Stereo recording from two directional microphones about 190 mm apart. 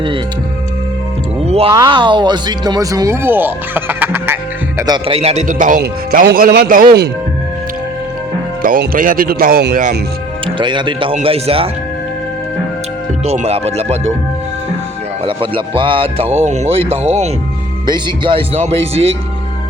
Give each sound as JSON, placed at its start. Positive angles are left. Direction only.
{"t": 1.5, "sound": "speech", "side_deg": -30}
{"t": 5.0, "sound": "speech", "side_deg": -30}
{"t": 8.6, "sound": "speech", "side_deg": -50}
{"t": 10.4, "sound": "speech", "side_deg": -25}
{"t": 13.2, "sound": "speech", "side_deg": -35}
{"t": 15.2, "sound": "speech", "side_deg": -30}